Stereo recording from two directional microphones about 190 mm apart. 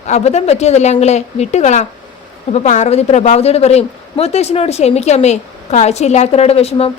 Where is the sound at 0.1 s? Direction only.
35° left (ahead or behind).